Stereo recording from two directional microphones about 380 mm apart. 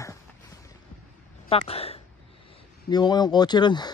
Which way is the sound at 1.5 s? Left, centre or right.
Centre.